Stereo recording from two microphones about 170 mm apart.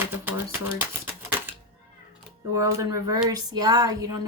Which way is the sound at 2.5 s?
20° right (ahead or behind).